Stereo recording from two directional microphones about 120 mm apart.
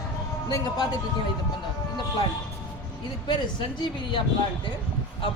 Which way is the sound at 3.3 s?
40° left (ahead or behind).